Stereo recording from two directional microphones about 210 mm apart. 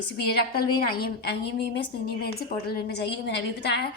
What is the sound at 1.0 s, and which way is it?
A woman's voice, 50° left (ahead or behind).